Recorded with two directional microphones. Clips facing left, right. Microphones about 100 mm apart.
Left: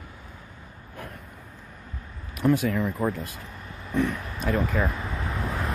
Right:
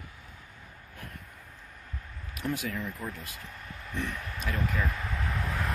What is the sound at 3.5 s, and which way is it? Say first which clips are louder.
Vehicle: left 4 dB; 20° left (ahead or behind).